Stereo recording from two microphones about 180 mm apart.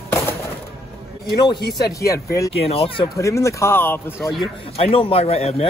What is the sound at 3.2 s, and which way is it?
Speech, 15° left (ahead or behind).